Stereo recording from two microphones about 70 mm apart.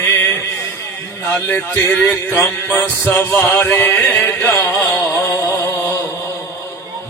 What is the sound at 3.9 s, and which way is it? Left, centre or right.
Chant, left.